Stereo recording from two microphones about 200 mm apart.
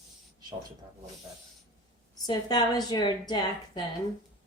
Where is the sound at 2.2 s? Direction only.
20° left (ahead or behind).